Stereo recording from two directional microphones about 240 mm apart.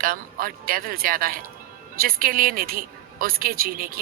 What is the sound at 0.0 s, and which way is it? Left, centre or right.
Speech, right.